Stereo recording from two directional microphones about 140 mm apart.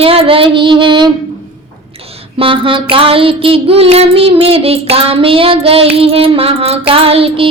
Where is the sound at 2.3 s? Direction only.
40° right (ahead or behind).